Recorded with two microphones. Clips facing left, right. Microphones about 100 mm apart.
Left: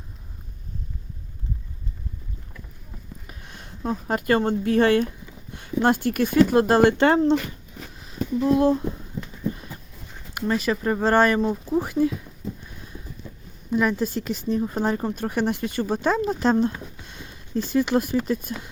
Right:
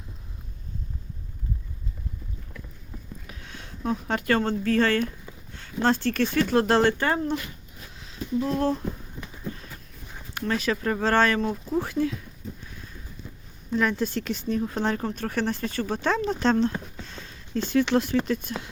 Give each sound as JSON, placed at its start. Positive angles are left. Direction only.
{"t": 4.1, "sound": "speech", "side_deg": 5}
{"t": 4.4, "sound": "speech", "side_deg": 15}
{"t": 7.0, "sound": "speech", "side_deg": 30}
{"t": 8.0, "sound": "a sound", "side_deg": 5}
{"t": 10.3, "sound": "speech", "side_deg": 10}
{"t": 13.7, "sound": "speech", "side_deg": 5}
{"t": 17.1, "sound": "a sound", "side_deg": 10}
{"t": 18.3, "sound": "speech", "side_deg": 5}